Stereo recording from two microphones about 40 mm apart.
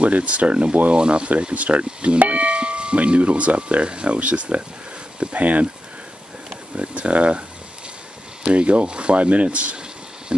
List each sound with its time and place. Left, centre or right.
0.0 s speech: right
1.5 s speech: right
2.1 s speech: right
5.4 s speech: right
6.8 s speech: right
8.5 s speech: right